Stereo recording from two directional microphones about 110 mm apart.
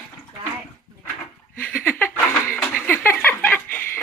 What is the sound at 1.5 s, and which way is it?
Laughter, 15° left (ahead or behind).